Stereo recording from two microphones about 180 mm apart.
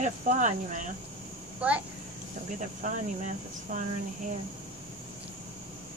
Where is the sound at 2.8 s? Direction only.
45° right (ahead or behind).